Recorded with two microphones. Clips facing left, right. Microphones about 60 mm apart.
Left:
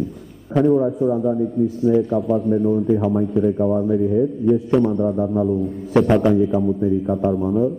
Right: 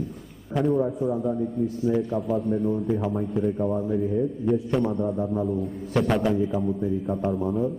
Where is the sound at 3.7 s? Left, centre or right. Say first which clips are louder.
Left 7 dB; centre.